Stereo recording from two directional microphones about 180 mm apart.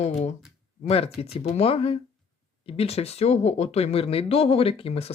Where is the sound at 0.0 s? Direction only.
35° left (ahead or behind).